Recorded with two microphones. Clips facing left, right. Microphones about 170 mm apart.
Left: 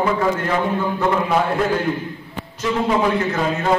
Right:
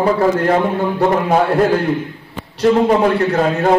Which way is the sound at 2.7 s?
45° right (ahead or behind).